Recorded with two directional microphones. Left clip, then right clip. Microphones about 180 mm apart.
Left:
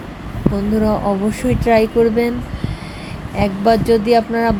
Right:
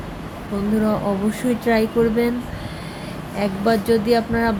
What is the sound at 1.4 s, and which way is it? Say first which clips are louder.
Speech: left 6 dB; 20° left (ahead or behind).